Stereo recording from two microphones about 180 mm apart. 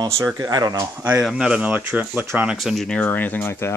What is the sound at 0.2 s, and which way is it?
Speech, 20° right (ahead or behind).